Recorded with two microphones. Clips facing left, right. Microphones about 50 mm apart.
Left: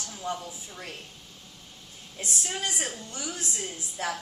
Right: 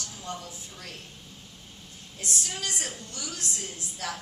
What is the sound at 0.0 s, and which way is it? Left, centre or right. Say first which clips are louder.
Speech: left 4 dB; left.